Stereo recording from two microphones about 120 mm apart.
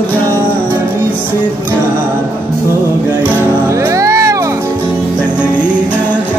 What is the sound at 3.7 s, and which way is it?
Music, 25° right (ahead or behind).